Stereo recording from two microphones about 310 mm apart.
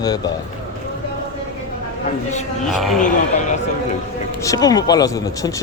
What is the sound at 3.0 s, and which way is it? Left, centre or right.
Speech, left.